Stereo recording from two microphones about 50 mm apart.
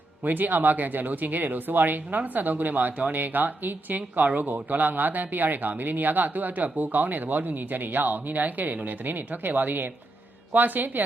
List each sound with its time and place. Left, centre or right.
0.3 s speech: right